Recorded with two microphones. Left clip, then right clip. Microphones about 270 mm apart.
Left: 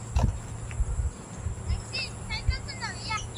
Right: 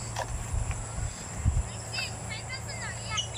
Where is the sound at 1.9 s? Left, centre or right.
Left.